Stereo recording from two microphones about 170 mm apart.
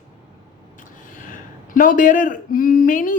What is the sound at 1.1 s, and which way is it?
A woman's voice, 50° left (ahead or behind).